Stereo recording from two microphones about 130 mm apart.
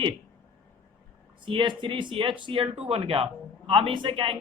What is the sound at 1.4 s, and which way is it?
Speech, 40° right (ahead or behind).